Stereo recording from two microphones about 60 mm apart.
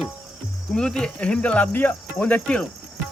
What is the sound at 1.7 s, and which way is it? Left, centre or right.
Cricket, left.